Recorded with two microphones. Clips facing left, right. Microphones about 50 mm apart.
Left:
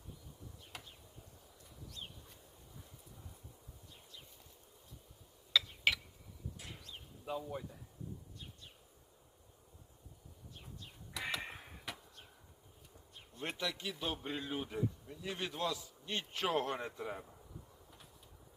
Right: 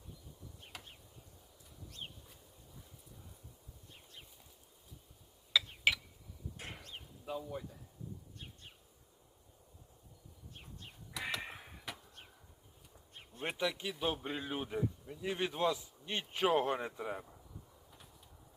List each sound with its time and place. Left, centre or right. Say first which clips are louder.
0.7 s a sound: even; centre
5.5 s mechanisms: even; centre
6.6 s a sound: right 3 dB; right
7.4 s speech: even; centre
11.1 s crow: even; centre
13.4 s a man's voice: right 3 dB; centre